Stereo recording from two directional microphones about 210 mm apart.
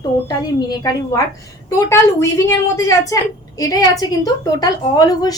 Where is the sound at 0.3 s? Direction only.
20° left (ahead or behind).